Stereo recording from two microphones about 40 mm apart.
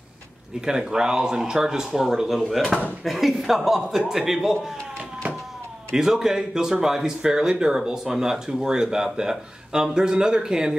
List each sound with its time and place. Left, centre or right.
0.7 s speech: centre
5.9 s speech: centre